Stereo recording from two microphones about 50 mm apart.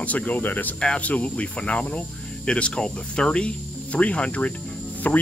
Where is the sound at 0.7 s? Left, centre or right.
Left.